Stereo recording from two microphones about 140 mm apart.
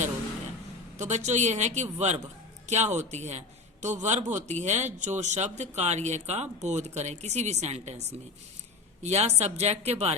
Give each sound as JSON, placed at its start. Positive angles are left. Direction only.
{"t": 0.9, "sound": "a man's voice", "side_deg": -55}
{"t": 9.0, "sound": "speech", "side_deg": -50}